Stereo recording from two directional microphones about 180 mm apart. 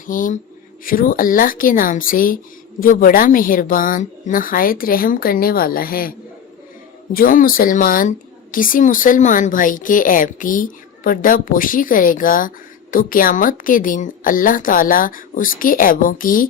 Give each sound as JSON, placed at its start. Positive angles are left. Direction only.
{"t": 0.1, "sound": "speech", "side_deg": 50}